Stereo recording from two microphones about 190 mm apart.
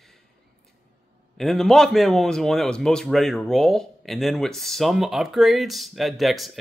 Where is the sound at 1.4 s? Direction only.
Centre (ahead or behind).